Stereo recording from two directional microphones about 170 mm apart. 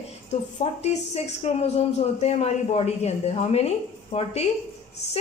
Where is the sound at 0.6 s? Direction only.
40° left (ahead or behind).